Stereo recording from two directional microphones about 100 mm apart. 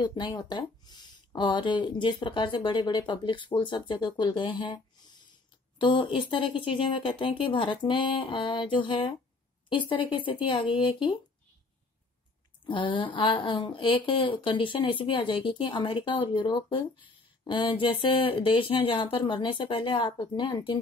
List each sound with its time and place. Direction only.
0.0 s speech: 50° left (ahead or behind)
5.8 s speech: 55° left (ahead or behind)
12.6 s speech: 55° left (ahead or behind)